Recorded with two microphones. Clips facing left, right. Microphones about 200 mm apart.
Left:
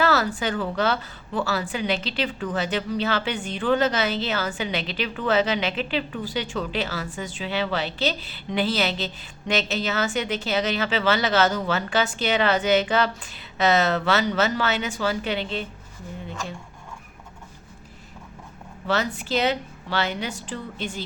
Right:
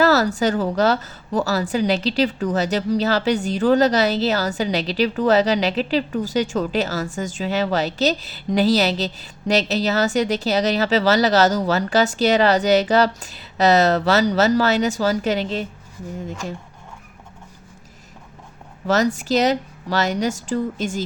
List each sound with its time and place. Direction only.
0.0 s a woman's voice: 40° right (ahead or behind)
18.9 s a woman's voice: 40° right (ahead or behind)